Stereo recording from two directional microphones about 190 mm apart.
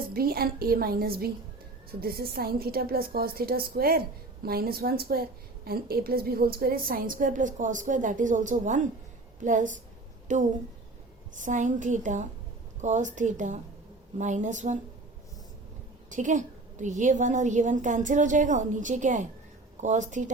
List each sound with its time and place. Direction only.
0.1 s a woman's voice: 50° right (ahead or behind)
16.0 s a woman's voice: 40° right (ahead or behind)